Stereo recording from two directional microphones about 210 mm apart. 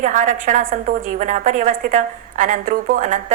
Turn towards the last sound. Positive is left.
turn(degrees=-40)  # may be behind; listen again after turning